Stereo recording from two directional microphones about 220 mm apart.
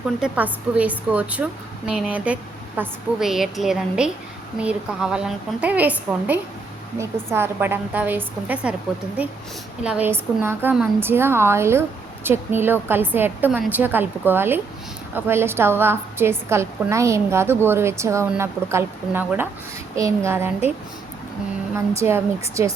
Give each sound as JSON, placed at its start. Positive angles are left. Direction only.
{"t": 0.2, "sound": "a woman's voice", "side_deg": -5}
{"t": 9.8, "sound": "a woman's voice", "side_deg": -5}
{"t": 21.9, "sound": "a woman's voice", "side_deg": -10}